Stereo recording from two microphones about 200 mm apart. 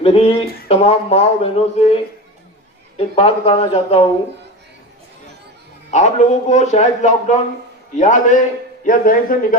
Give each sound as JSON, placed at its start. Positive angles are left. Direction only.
{"t": 0.0, "sound": "speech", "side_deg": 30}
{"t": 3.2, "sound": "a man's voice", "side_deg": 30}
{"t": 5.9, "sound": "speech", "side_deg": 35}